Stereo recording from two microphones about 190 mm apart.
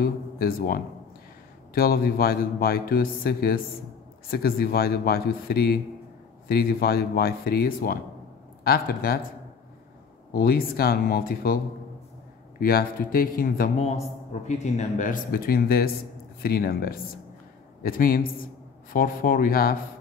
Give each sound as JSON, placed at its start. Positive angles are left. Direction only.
{"t": 0.0, "sound": "speech", "side_deg": 50}
{"t": 1.8, "sound": "speech", "side_deg": 50}
{"t": 10.3, "sound": "speech", "side_deg": 50}